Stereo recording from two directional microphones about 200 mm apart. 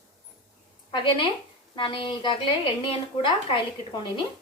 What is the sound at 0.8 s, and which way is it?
A woman's voice, 25° left (ahead or behind).